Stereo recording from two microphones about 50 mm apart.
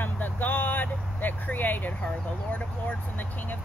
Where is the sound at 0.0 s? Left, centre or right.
Left.